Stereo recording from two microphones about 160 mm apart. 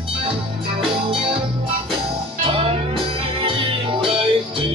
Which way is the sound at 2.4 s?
35° right (ahead or behind).